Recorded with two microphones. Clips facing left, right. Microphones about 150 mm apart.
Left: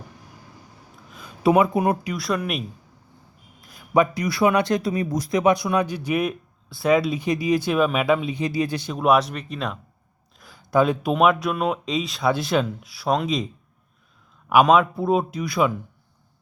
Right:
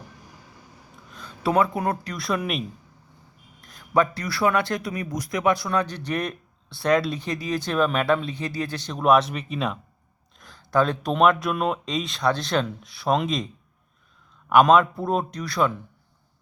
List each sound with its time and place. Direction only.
1.4 s speech: 15° left (ahead or behind)
2.1 s speech: centre (ahead or behind); by 4.8 s 20° left (ahead or behind)
4.8 s speech: 30° left (ahead or behind); by 9.7 s 5° right (ahead or behind)
10.4 s speech: 10° left (ahead or behind)
14.5 s speech: 5° left (ahead or behind)